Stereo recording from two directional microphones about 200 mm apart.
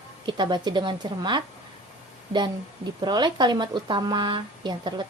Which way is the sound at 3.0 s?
20° right (ahead or behind).